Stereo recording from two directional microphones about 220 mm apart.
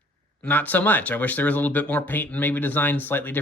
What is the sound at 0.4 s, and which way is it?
Speech, 10° left (ahead or behind).